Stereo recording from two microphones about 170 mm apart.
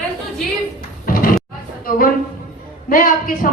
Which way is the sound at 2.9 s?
55° left (ahead or behind).